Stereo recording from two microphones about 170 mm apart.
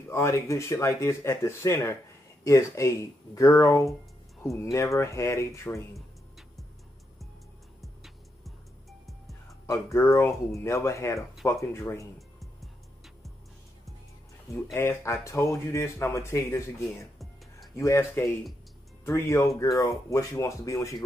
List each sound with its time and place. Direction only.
0.1 s speech: 15° left (ahead or behind)
7.8 s music: centre (ahead or behind)
9.3 s speech: 20° left (ahead or behind)
12.2 s music: centre (ahead or behind)
14.5 s speech: 15° left (ahead or behind)